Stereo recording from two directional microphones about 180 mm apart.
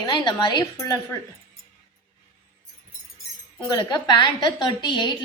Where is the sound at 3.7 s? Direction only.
25° left (ahead or behind).